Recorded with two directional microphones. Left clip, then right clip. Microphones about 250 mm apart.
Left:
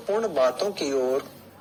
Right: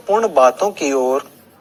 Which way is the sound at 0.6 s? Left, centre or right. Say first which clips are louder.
Right 8 dB; centre.